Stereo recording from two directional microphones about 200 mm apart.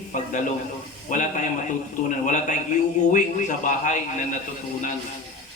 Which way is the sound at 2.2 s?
40° left (ahead or behind).